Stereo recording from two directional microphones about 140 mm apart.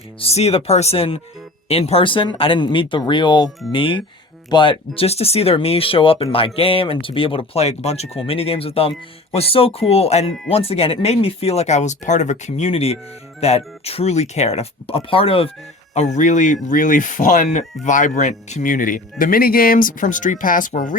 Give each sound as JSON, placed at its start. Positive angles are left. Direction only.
{"t": 0.2, "sound": "speech", "side_deg": 45}
{"t": 16.0, "sound": "speech", "side_deg": 60}
{"t": 19.2, "sound": "speech", "side_deg": 90}